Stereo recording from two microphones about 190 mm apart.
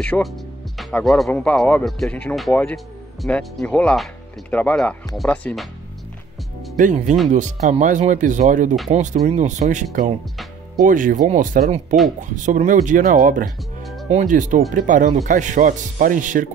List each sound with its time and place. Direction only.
0.0 s speech: 5° left (ahead or behind)
6.8 s speech: 40° right (ahead or behind)